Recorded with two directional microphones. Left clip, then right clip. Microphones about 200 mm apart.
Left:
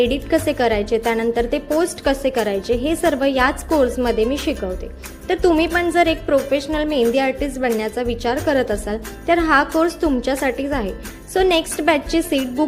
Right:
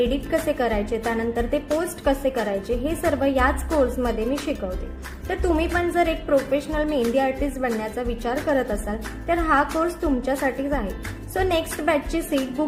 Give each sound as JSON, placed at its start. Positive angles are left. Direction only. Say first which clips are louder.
{"t": 0.0, "sound": "a woman's voice", "louder": "left 5 dB", "side_deg": 35}